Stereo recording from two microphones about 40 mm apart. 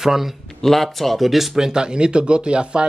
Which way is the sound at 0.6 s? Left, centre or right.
Centre.